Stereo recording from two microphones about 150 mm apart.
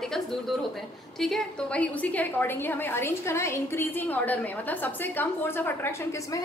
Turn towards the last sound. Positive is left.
turn(degrees=15)  # may be behind; listen again after turning